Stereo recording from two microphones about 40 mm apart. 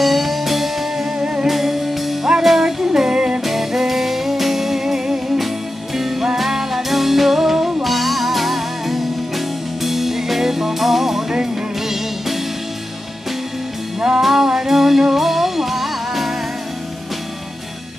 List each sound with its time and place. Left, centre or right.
0.0 s music: centre
1.2 s music: centre
1.5 s music: centre
3.4 s music: centre
14.2 s music: centre